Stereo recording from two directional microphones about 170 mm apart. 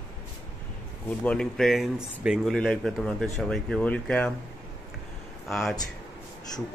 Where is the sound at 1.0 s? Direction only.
5° left (ahead or behind).